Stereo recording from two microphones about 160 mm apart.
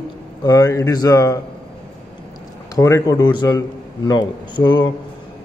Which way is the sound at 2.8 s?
20° left (ahead or behind).